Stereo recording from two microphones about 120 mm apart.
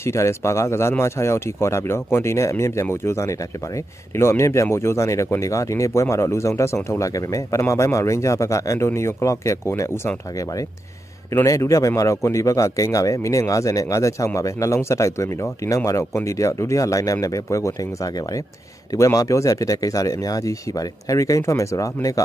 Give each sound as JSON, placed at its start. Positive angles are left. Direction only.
{"t": 0.0, "sound": "speech", "side_deg": 25}
{"t": 11.3, "sound": "speech", "side_deg": 25}